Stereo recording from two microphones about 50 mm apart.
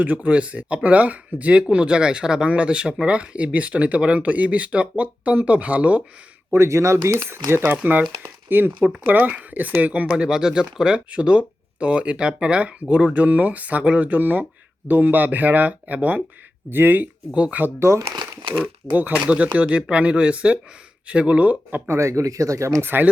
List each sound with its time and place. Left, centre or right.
0.0 s speech: right
6.7 s speech: right
7.8 s speech: right
10.2 s speech: centre
13.1 s speech: right
16.6 s speech: right
17.3 s speech: right
17.7 s speech: right
18.9 s speech: right
21.8 s speech: right
22.8 s speech: right